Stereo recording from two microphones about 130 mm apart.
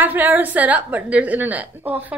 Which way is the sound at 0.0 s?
15° right (ahead or behind).